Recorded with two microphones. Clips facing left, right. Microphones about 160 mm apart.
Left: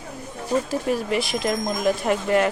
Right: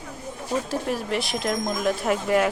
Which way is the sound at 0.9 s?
Centre (ahead or behind).